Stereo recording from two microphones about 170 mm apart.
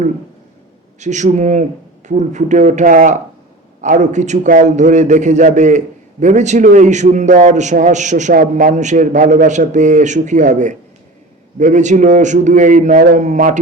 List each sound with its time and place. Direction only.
0.9 s a man's voice: 45° right (ahead or behind)